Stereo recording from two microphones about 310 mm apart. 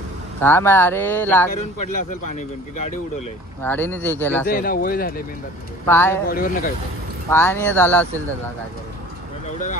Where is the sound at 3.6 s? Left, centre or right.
Centre.